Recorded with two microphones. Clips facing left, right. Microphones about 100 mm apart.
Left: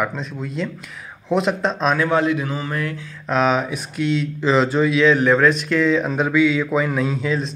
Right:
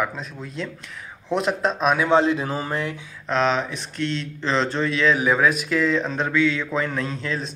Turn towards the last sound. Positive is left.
turn(degrees=5)  # may be behind; listen again after turning